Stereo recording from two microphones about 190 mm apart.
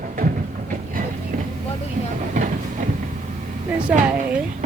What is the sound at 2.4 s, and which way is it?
Train, 40° right (ahead or behind).